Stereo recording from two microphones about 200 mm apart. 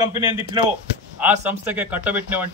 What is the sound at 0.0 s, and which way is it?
A man's voice, 20° right (ahead or behind).